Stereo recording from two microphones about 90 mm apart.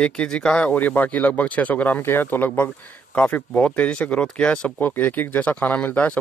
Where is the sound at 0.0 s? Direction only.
10° left (ahead or behind).